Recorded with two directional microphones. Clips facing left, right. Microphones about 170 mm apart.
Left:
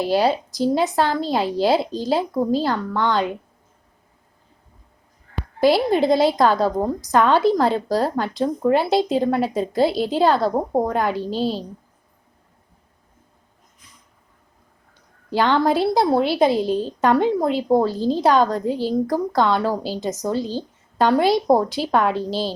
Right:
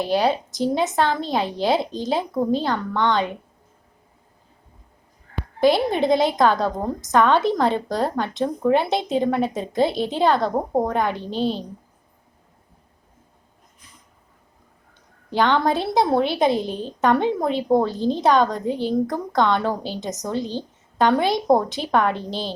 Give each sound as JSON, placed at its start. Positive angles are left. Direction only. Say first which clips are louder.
{"t": 0.0, "sound": "a woman's voice", "louder": "left 2 dB", "side_deg": 5}
{"t": 5.7, "sound": "a woman's voice", "louder": "left 2 dB", "side_deg": 5}
{"t": 15.3, "sound": "a woman's voice", "louder": "left 1 dB", "side_deg": 5}
{"t": 15.7, "sound": "a woman's voice", "louder": "left 5 dB", "side_deg": -20}
{"t": 16.0, "sound": "a woman's voice", "louder": "left 2 dB", "side_deg": 5}